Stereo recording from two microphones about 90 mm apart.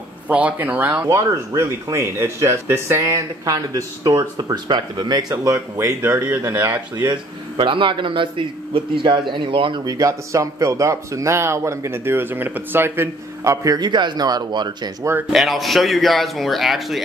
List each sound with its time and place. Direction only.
0.3 s speech: 15° right (ahead or behind)
1.0 s speech: 35° right (ahead or behind)
6.0 s speech: 25° right (ahead or behind)
7.5 s a man's voice: 70° right (ahead or behind)
9.8 s speech: 40° right (ahead or behind)
13.4 s a man's voice: 35° right (ahead or behind)
13.7 s speech: 55° right (ahead or behind)
15.3 s a man's voice: centre (ahead or behind)